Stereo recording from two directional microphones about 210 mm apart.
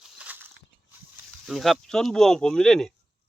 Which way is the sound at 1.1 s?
Centre (ahead or behind).